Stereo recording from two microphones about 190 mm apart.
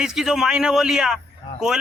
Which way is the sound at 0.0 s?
Centre (ahead or behind).